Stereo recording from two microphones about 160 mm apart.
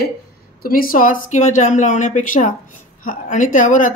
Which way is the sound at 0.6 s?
65° left (ahead or behind).